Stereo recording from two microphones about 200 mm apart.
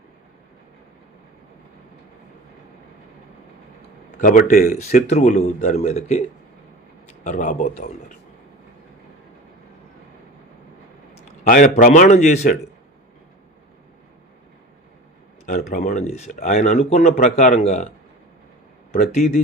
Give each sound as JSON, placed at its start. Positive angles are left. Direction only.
{"t": 4.2, "sound": "speech", "side_deg": 40}
{"t": 11.1, "sound": "a man's voice", "side_deg": 35}
{"t": 15.4, "sound": "speech", "side_deg": 40}
{"t": 18.9, "sound": "speech", "side_deg": 35}